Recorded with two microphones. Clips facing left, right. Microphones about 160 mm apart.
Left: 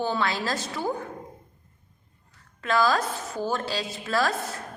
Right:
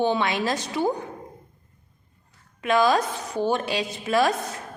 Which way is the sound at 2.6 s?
20° right (ahead or behind).